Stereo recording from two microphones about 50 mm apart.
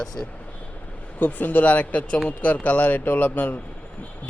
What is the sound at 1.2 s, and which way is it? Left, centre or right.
Speech, left.